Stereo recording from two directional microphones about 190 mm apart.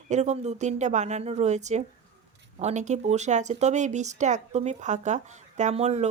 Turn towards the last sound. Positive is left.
turn(degrees=-35)  # may be behind; listen again after turning